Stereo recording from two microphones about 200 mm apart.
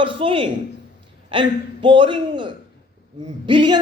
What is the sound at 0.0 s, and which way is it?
A man's voice, 25° right (ahead or behind).